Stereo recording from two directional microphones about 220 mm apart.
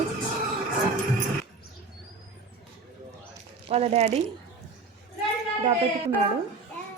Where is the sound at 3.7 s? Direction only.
30° right (ahead or behind).